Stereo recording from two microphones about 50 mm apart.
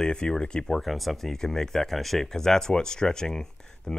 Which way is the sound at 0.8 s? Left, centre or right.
Centre.